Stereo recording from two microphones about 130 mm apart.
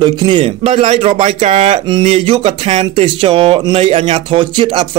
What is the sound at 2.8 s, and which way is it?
Speech, 40° right (ahead or behind).